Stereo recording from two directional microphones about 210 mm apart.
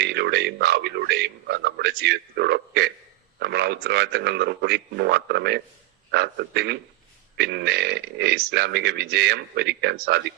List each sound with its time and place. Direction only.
0.0 s a man's voice: 50° right (ahead or behind)